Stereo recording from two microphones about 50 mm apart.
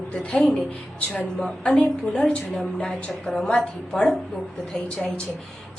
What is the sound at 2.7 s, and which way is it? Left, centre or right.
A woman's voice, centre.